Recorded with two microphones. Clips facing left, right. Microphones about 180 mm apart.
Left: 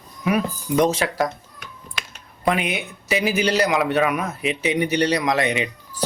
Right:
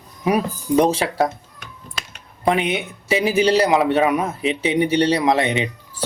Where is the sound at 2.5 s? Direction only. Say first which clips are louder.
Right 3 dB; 25° right (ahead or behind).